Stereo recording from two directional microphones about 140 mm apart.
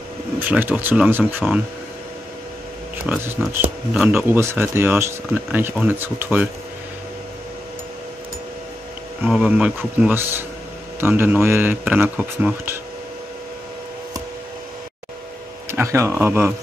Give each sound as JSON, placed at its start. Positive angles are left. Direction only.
{"t": 0.4, "sound": "speech", "side_deg": -15}
{"t": 3.1, "sound": "speech", "side_deg": -15}
{"t": 3.9, "sound": "speech", "side_deg": -5}
{"t": 4.3, "sound": "speech", "side_deg": -20}
{"t": 9.2, "sound": "speech", "side_deg": -5}
{"t": 15.7, "sound": "speech", "side_deg": -20}